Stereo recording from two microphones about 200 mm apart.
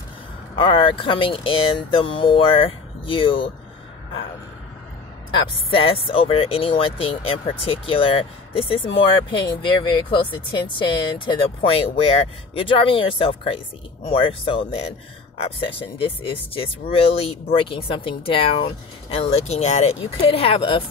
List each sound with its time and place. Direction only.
0.6 s speech: 25° left (ahead or behind)
5.7 s speech: 25° left (ahead or behind)